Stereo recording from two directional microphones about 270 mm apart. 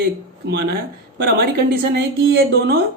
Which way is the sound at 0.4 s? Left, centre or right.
Right.